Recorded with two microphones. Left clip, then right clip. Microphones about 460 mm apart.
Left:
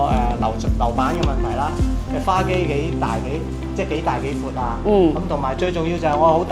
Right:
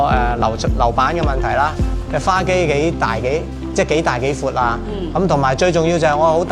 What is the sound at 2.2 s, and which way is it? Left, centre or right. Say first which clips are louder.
Speech: right 4 dB; right.